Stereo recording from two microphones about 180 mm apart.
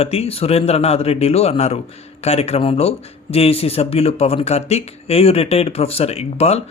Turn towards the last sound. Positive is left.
turn(degrees=35)  # may be behind; listen again after turning